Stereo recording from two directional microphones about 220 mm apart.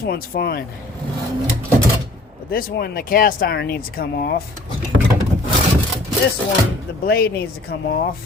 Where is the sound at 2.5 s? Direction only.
40° left (ahead or behind).